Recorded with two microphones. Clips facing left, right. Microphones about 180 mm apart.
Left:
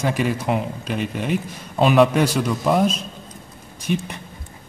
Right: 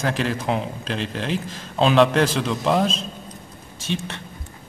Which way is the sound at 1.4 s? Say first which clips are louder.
Even; 90° right.